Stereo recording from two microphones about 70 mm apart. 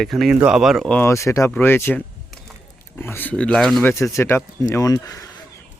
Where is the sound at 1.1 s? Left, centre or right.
Left.